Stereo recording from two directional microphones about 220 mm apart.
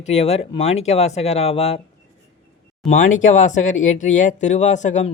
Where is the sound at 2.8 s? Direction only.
35° left (ahead or behind).